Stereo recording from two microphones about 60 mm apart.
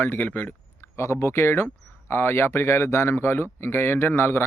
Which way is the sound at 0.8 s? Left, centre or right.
Left.